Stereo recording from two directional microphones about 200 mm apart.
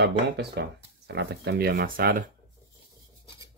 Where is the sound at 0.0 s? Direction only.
55° right (ahead or behind).